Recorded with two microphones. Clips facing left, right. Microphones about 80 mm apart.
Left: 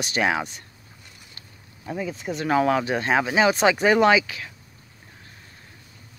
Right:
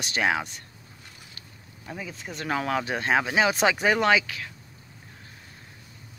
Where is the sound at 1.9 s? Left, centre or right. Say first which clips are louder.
Left 8 dB; centre.